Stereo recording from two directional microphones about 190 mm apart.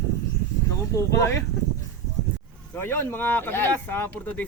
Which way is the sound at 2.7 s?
10° left (ahead or behind).